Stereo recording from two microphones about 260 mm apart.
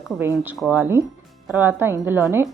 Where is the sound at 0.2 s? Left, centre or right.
Centre.